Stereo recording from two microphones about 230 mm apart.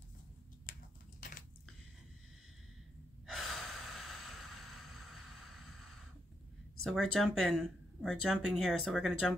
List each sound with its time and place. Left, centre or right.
0.7 s a sound: left
3.3 s gasp: centre
6.8 s speech: centre